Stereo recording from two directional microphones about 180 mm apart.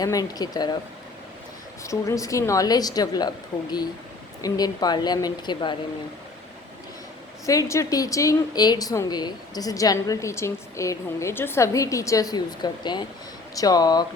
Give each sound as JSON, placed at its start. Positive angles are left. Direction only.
{"t": 0.0, "sound": "a woman's voice", "side_deg": 20}
{"t": 1.8, "sound": "a woman's voice", "side_deg": 15}
{"t": 7.4, "sound": "a woman's voice", "side_deg": 20}